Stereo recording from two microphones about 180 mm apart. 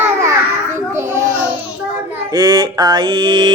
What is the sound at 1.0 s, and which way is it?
Babbling, 15° right (ahead or behind).